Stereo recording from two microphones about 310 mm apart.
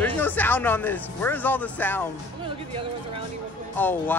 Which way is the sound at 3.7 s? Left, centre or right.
Centre.